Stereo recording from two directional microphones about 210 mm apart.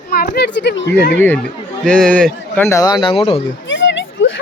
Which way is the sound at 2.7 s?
20° left (ahead or behind).